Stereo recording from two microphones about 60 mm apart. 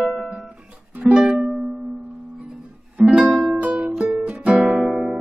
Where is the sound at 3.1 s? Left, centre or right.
Centre.